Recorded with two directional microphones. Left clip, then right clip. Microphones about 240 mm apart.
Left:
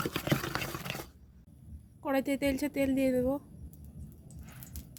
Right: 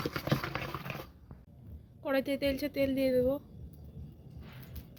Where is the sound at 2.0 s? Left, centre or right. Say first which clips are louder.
Even; left.